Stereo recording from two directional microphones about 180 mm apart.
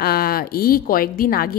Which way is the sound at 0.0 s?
55° left (ahead or behind).